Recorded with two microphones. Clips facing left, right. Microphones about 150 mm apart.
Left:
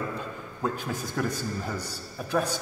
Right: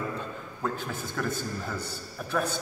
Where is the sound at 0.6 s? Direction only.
15° left (ahead or behind).